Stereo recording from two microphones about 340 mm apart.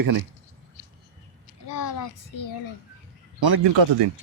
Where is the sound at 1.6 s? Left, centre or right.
Left.